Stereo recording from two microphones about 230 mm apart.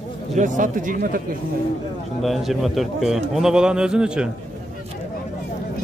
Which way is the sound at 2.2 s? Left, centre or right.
Centre.